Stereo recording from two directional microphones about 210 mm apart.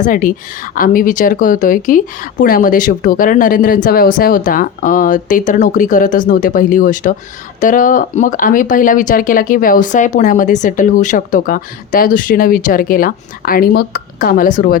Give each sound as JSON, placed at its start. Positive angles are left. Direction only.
{"t": 0.0, "sound": "speech", "side_deg": 40}